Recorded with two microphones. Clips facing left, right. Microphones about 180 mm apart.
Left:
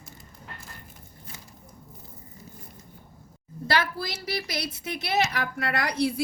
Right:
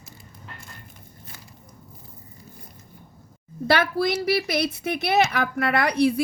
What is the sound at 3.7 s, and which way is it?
A woman's voice, 60° right (ahead or behind).